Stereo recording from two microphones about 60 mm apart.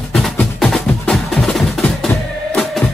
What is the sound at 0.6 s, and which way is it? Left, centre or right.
Music, centre.